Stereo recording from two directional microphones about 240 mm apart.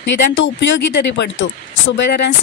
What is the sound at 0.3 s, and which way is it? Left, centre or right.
Speech, left.